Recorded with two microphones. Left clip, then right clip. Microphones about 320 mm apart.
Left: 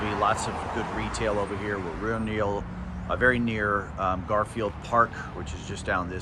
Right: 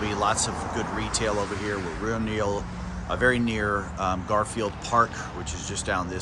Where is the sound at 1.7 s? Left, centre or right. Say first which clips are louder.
Right 1 dB; centre.